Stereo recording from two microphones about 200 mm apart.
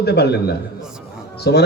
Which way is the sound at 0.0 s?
55° left (ahead or behind).